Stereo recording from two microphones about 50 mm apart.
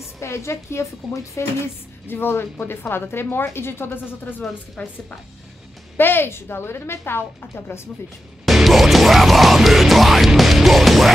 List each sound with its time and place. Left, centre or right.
0.2 s speech: left
2.0 s a woman's voice: left
4.8 s speech: left
5.9 s a woman's voice: left
8.5 s music: centre